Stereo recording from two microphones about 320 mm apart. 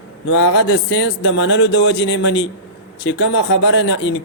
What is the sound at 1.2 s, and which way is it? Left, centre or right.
A man's voice, left.